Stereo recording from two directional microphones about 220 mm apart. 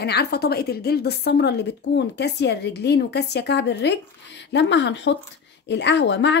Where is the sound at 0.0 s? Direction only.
50° left (ahead or behind).